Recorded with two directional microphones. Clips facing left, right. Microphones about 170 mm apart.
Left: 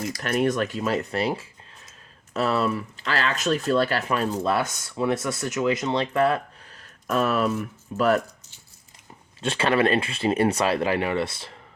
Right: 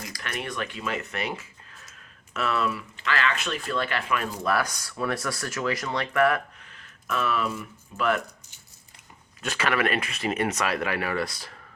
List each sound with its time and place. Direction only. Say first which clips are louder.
0.2 s speech: left 10 dB; 45° left (ahead or behind)
4.4 s speech: left 2 dB; 25° left (ahead or behind); by 8.2 s 40° left (ahead or behind)
9.4 s speech: left 5 dB; 30° left (ahead or behind)